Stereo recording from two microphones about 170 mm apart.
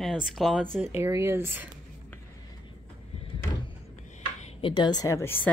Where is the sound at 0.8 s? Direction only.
15° right (ahead or behind).